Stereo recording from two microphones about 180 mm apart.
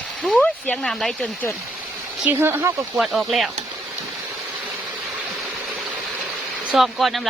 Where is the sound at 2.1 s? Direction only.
10° right (ahead or behind).